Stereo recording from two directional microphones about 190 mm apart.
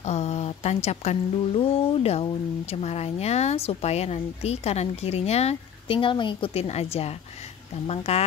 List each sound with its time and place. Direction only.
0.0 s speech: 35° left (ahead or behind)